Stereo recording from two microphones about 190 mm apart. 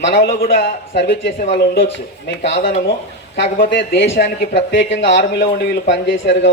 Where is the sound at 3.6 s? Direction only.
70° left (ahead or behind).